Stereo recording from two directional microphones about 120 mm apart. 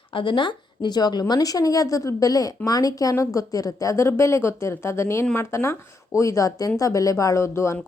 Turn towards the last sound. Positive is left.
turn(degrees=25)  # may be behind; listen again after turning